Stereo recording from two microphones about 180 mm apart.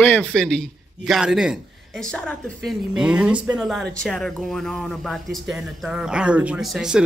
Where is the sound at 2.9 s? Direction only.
5° right (ahead or behind).